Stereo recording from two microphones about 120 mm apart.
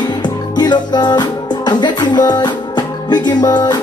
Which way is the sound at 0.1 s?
35° left (ahead or behind).